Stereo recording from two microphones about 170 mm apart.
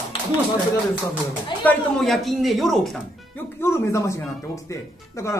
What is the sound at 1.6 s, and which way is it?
Speech, 5° left (ahead or behind).